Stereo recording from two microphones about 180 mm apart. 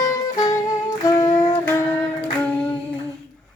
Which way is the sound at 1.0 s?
20° left (ahead or behind).